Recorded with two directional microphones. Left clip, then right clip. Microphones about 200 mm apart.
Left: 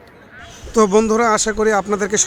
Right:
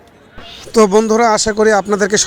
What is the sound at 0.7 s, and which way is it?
Speech, 30° right (ahead or behind).